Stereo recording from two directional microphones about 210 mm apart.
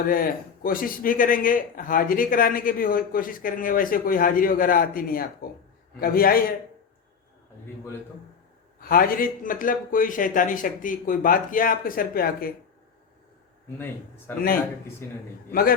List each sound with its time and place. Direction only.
0.1 s a man's voice: 45° left (ahead or behind)
8.8 s a man's voice: 45° left (ahead or behind)